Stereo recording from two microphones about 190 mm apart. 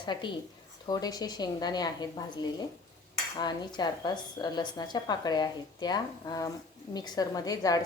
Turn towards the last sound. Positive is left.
turn(degrees=20)  # may be behind; listen again after turning